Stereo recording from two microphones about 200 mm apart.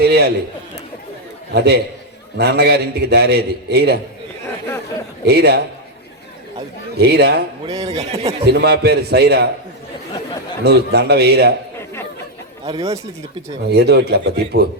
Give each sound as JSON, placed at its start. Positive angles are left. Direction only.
{"t": 0.0, "sound": "speech", "side_deg": -55}
{"t": 1.5, "sound": "a man's voice", "side_deg": -55}
{"t": 5.2, "sound": "a man's voice", "side_deg": -55}
{"t": 6.9, "sound": "a man's voice", "side_deg": -55}
{"t": 7.6, "sound": "a man's voice", "side_deg": -20}
{"t": 7.9, "sound": "speech", "side_deg": -30}
{"t": 8.5, "sound": "speech", "side_deg": -55}
{"t": 10.6, "sound": "speech", "side_deg": -55}
{"t": 12.6, "sound": "a man's voice", "side_deg": -20}
{"t": 13.7, "sound": "speech", "side_deg": -55}